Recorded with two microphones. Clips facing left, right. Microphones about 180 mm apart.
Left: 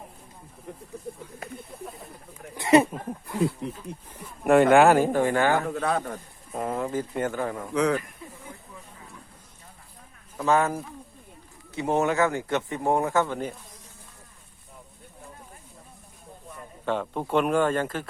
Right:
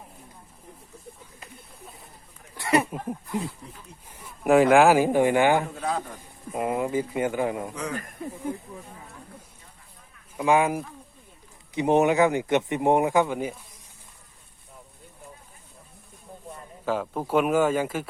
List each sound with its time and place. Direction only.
2.6 s a sound: 20° left (ahead or behind)
4.4 s speech: centre (ahead or behind)
5.6 s a man's voice: 65° left (ahead or behind)
6.5 s speech: 10° right (ahead or behind)
7.7 s a man's voice: 75° left (ahead or behind)
7.9 s speech: 45° right (ahead or behind)
10.3 s speech: 10° right (ahead or behind)
16.8 s speech: 5° right (ahead or behind)